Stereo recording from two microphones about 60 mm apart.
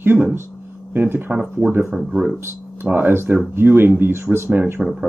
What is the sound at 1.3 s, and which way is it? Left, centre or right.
Speech, centre.